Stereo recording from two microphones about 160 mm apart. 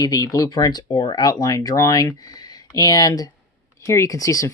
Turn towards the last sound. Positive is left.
turn(degrees=20)  # may be behind; listen again after turning